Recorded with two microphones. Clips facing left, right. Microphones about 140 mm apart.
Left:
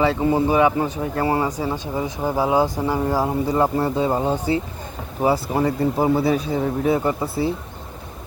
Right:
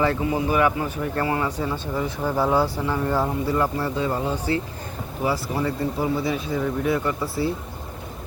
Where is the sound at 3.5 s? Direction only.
25° left (ahead or behind).